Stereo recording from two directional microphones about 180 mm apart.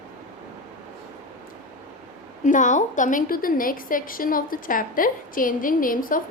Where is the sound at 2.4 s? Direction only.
45° left (ahead or behind).